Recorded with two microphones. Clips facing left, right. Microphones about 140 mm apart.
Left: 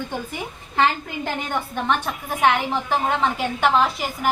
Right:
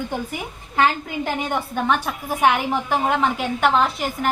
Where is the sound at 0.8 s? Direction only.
5° right (ahead or behind).